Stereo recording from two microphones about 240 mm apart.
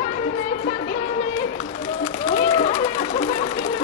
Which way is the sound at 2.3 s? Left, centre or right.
Left.